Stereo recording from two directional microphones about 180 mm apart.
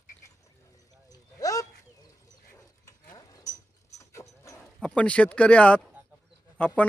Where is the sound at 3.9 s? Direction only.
15° left (ahead or behind).